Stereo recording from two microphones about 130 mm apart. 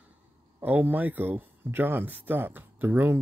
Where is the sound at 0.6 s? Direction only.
15° right (ahead or behind).